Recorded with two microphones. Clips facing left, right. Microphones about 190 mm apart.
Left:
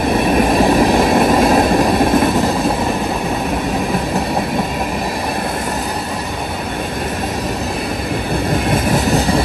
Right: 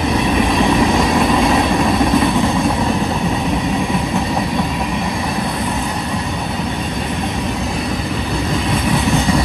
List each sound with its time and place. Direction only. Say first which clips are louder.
0.2 s train: left 4 dB; 50° left (ahead or behind)
0.9 s vehicle: left 2 dB; 55° left (ahead or behind); by 2.5 s 40° left (ahead or behind)
8.6 s vehicle: left 1 dB; 40° left (ahead or behind)